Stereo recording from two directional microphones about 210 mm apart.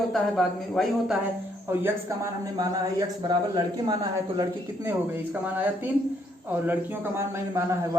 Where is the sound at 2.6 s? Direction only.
20° right (ahead or behind).